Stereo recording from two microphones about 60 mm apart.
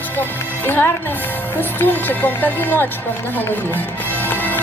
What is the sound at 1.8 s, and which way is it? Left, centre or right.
Speech, left.